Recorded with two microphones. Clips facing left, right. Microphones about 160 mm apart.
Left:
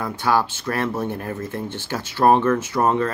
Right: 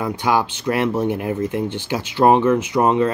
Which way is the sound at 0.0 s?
15° right (ahead or behind).